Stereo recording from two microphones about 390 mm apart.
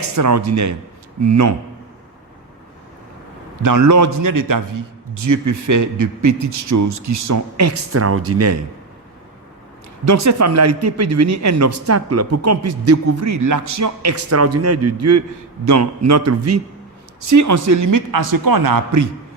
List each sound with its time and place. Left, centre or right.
0.2 s a man's voice: right
3.6 s a man's voice: right
10.1 s a man's voice: right